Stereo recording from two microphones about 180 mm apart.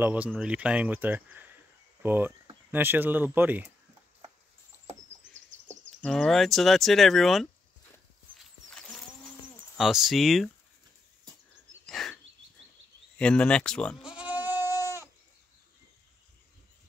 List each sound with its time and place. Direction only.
0.0 s speech: 10° right (ahead or behind)
4.7 s rodents: 15° left (ahead or behind)
5.9 s speech: centre (ahead or behind)
8.4 s horse: 5° left (ahead or behind)
9.8 s speech: centre (ahead or behind)
11.8 s a sound: centre (ahead or behind)
13.2 s speech: 5° left (ahead or behind); by 14.7 s 10° right (ahead or behind)